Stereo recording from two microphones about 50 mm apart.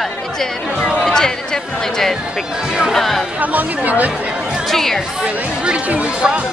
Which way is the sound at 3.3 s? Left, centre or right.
Right.